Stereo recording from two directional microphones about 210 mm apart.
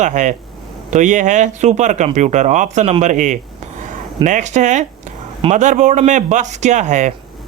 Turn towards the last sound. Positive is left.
turn(degrees=-35)  # may be behind; listen again after turning